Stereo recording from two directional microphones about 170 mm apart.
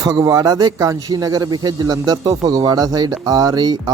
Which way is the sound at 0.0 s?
20° right (ahead or behind).